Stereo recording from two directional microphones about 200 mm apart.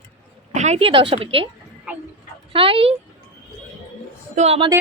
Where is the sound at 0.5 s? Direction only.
35° right (ahead or behind).